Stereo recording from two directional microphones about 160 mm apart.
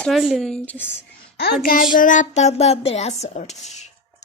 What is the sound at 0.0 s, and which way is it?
Speech, centre (ahead or behind).